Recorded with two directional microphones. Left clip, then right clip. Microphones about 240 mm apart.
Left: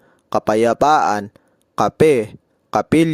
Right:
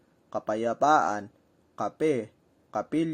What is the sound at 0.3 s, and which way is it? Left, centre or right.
Speech, left.